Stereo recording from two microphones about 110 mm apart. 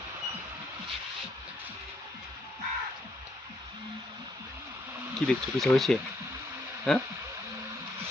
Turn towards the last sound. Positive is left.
turn(degrees=5)  # may be behind; listen again after turning